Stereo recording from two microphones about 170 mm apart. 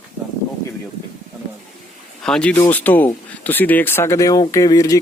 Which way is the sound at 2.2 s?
5° left (ahead or behind).